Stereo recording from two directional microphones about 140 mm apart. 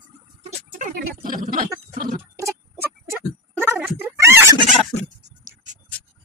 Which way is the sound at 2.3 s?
20° right (ahead or behind).